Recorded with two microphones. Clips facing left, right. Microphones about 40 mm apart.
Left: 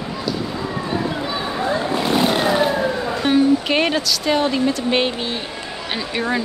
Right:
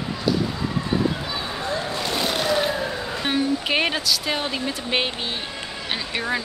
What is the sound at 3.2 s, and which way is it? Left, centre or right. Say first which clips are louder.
Vehicle: left 7 dB; centre.